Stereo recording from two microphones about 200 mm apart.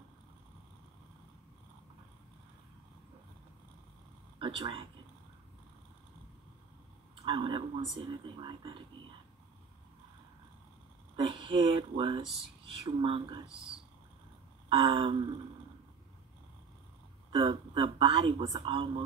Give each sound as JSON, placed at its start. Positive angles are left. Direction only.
{"t": 4.4, "sound": "speech", "side_deg": -25}
{"t": 7.2, "sound": "a man's voice", "side_deg": -25}
{"t": 11.1, "sound": "a man's voice", "side_deg": -25}
{"t": 14.7, "sound": "a man's voice", "side_deg": -25}
{"t": 17.3, "sound": "a man's voice", "side_deg": -25}